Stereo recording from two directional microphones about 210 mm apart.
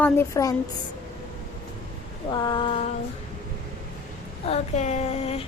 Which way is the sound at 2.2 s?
20° left (ahead or behind).